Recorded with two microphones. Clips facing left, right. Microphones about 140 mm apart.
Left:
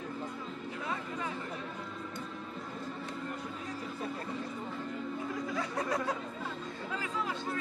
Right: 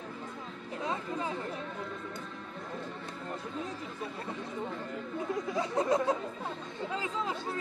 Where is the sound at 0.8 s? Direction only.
25° right (ahead or behind).